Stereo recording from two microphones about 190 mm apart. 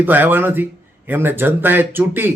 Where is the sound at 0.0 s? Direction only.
10° right (ahead or behind).